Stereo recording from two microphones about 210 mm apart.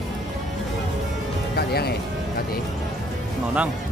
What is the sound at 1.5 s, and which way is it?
Music, 50° left (ahead or behind).